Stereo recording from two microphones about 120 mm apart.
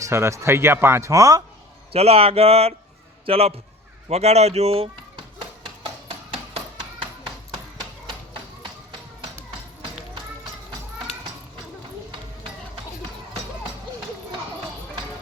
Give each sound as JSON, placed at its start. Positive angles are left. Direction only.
{"t": 0.0, "sound": "speech", "side_deg": -25}
{"t": 1.9, "sound": "speech", "side_deg": -55}